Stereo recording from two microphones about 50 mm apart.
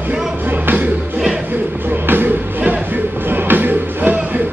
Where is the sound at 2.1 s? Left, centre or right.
Right.